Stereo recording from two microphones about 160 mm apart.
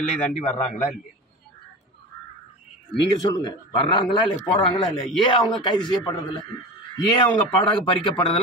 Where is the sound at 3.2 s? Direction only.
25° left (ahead or behind).